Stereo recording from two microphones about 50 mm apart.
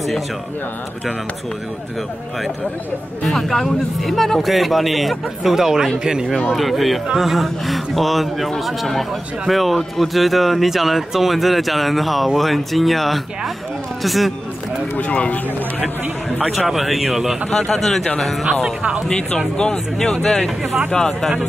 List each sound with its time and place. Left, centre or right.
3.3 s a man's voice: centre
6.5 s a man's voice: centre
15.0 s speech: left
16.5 s a man's voice: centre
17.5 s speech: centre
19.0 s speech: centre